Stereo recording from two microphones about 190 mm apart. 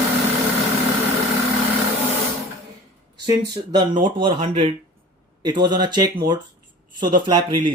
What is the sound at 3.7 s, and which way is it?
Speech, 25° right (ahead or behind).